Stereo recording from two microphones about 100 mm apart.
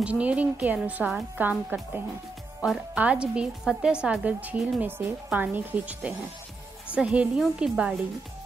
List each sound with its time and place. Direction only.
0.0 s a woman's voice: 15° right (ahead or behind)